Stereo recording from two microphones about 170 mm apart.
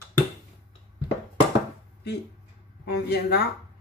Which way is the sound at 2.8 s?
70° left (ahead or behind).